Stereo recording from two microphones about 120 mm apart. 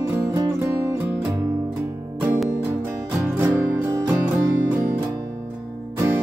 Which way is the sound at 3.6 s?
20° right (ahead or behind).